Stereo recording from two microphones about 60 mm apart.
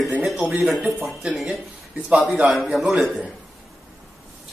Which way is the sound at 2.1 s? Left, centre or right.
Centre.